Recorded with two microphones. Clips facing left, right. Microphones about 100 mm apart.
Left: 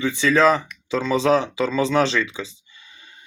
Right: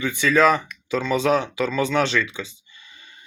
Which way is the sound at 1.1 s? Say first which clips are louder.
Left 2 dB; 30° left (ahead or behind).